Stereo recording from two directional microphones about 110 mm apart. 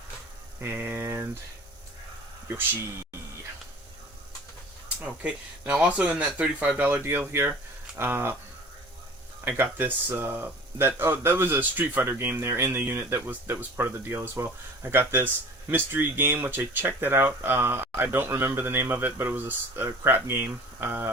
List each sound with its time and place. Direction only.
0.6 s speech: 20° right (ahead or behind)
5.0 s speech: 10° right (ahead or behind)
9.4 s speech: 20° right (ahead or behind)